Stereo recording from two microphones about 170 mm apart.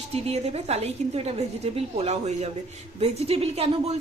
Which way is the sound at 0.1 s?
35° right (ahead or behind).